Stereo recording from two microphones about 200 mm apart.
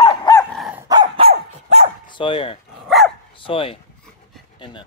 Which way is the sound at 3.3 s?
25° left (ahead or behind).